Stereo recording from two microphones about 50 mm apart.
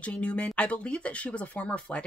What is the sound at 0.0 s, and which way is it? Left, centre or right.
Speech, left.